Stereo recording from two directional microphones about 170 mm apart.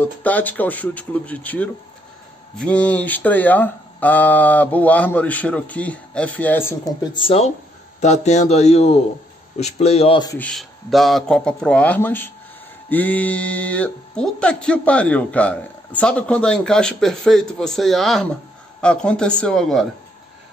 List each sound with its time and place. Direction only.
0.0 s speech: 10° left (ahead or behind)
7.2 s a man's voice: 35° left (ahead or behind)
10.3 s speech: 5° left (ahead or behind)